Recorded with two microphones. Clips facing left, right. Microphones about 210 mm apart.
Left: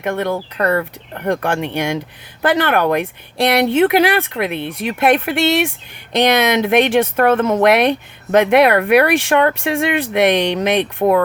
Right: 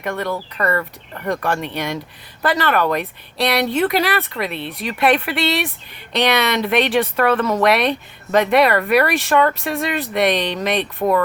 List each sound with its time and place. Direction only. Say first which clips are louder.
0.0 s speech: left 4 dB; 55° left (ahead or behind)